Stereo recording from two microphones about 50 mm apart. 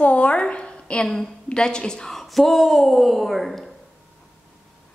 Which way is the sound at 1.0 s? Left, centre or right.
Centre.